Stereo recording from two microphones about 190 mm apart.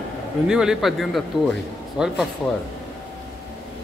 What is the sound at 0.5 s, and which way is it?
A man's voice, 5° right (ahead or behind).